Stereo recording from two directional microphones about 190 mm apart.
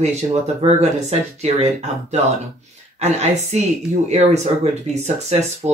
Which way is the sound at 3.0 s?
35° right (ahead or behind).